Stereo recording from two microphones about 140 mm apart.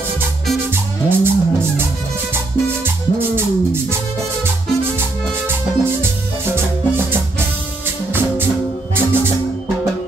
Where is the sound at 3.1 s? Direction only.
15° right (ahead or behind).